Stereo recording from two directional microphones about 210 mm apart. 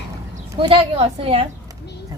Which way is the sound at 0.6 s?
25° right (ahead or behind).